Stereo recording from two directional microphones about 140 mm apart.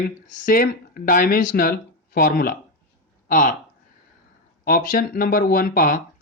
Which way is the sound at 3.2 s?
75° left (ahead or behind).